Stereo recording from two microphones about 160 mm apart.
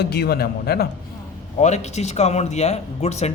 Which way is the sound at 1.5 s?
45° left (ahead or behind).